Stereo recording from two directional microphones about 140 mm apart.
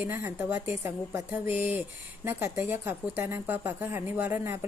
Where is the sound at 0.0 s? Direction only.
15° right (ahead or behind).